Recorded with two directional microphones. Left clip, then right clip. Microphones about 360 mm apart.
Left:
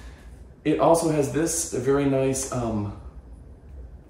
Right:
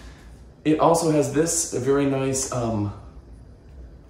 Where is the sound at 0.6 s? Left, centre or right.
Centre.